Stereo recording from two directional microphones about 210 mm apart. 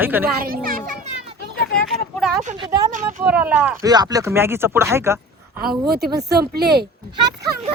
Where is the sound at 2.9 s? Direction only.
40° right (ahead or behind).